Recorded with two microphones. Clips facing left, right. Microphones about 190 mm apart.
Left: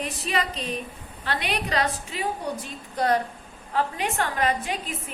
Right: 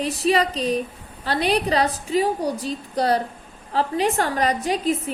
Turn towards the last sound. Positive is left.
turn(degrees=-40)  # may be behind; listen again after turning